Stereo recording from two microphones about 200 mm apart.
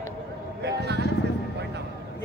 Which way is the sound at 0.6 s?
55° right (ahead or behind).